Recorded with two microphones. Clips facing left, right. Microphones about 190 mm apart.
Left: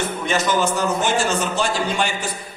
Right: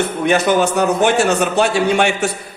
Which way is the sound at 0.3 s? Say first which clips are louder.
Right 6 dB; 60° right (ahead or behind).